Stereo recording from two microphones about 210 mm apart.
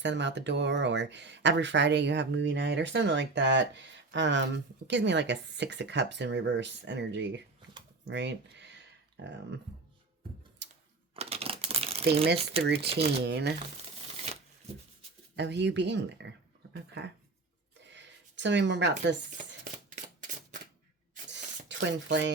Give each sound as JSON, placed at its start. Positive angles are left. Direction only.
{"t": 0.0, "sound": "speech", "side_deg": -60}
{"t": 8.0, "sound": "a sound", "side_deg": -55}
{"t": 9.2, "sound": "speech", "side_deg": -55}
{"t": 10.6, "sound": "a sound", "side_deg": -55}
{"t": 11.1, "sound": "crumpling", "side_deg": -30}
{"t": 12.6, "sound": "speech", "side_deg": -50}
{"t": 12.9, "sound": "speech", "side_deg": -30}
{"t": 13.2, "sound": "speech", "side_deg": -50}
{"t": 15.4, "sound": "speech", "side_deg": -55}
{"t": 19.6, "sound": "a sound", "side_deg": -40}
{"t": 21.7, "sound": "speech", "side_deg": -60}